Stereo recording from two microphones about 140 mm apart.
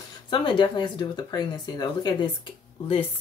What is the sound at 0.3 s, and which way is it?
Speech, 35° left (ahead or behind).